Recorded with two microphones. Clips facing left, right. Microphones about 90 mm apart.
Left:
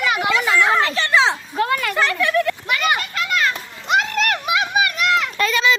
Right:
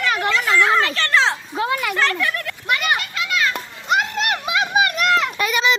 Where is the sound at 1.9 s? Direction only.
5° left (ahead or behind).